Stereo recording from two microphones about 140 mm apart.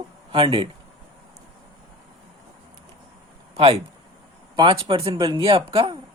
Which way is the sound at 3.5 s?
45° right (ahead or behind).